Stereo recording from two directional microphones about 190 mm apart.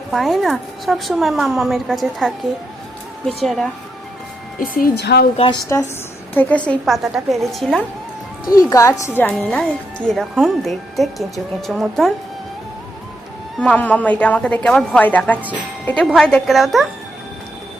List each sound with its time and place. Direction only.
0.1 s a woman's voice: centre (ahead or behind)
4.6 s speech: 50° left (ahead or behind)
5.7 s a woman's voice: 15° left (ahead or behind)
8.5 s a woman's voice: 15° left (ahead or behind); by 12.1 s centre (ahead or behind)
13.6 s a woman's voice: 5° left (ahead or behind)